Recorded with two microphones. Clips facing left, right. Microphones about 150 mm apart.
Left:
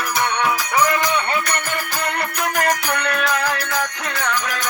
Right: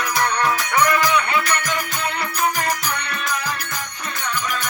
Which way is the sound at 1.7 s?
65° left (ahead or behind).